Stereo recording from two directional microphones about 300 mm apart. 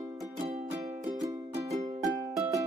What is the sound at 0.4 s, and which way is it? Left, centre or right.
Music, centre.